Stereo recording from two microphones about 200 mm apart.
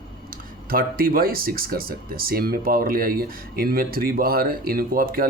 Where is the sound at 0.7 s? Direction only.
45° right (ahead or behind).